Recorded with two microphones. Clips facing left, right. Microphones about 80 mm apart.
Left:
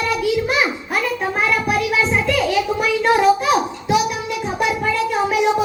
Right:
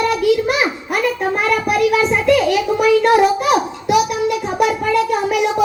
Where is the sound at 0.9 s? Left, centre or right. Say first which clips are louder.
Right 3 dB; right.